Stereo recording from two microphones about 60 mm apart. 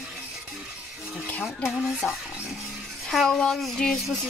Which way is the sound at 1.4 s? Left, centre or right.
Centre.